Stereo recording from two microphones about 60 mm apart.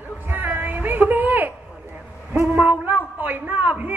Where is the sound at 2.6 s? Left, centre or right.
Right.